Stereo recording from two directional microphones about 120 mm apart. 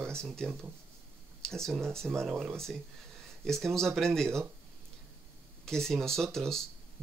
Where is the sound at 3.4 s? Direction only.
5° left (ahead or behind).